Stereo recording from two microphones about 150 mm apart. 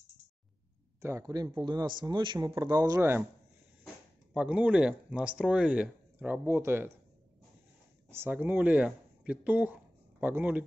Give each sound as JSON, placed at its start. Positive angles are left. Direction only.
{"t": 1.0, "sound": "speech", "side_deg": -20}
{"t": 8.1, "sound": "speech", "side_deg": -15}